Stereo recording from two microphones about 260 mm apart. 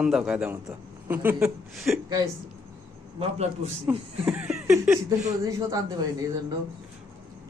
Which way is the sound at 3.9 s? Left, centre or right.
Centre.